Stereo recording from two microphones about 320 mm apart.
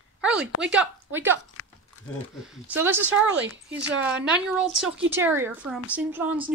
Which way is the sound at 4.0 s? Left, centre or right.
Centre.